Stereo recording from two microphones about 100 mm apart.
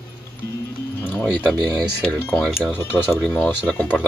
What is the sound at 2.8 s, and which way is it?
Speech, 25° left (ahead or behind).